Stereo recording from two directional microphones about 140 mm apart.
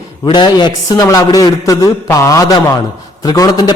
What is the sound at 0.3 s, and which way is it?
A man's voice, 30° left (ahead or behind).